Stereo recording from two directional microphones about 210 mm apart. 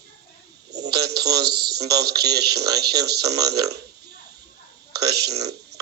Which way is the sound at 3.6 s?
50° right (ahead or behind).